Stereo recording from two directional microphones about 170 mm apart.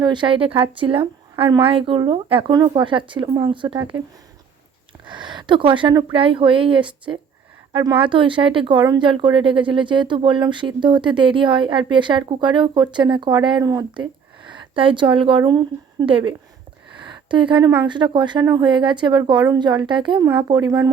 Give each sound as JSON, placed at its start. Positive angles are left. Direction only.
{"t": 0.0, "sound": "speech", "side_deg": -25}
{"t": 5.0, "sound": "a woman's voice", "side_deg": -30}
{"t": 17.0, "sound": "a sound", "side_deg": -30}
{"t": 17.8, "sound": "speech", "side_deg": -30}